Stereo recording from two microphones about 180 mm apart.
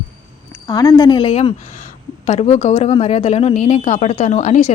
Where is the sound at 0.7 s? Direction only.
20° left (ahead or behind).